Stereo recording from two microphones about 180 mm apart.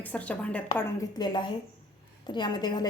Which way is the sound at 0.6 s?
20° left (ahead or behind).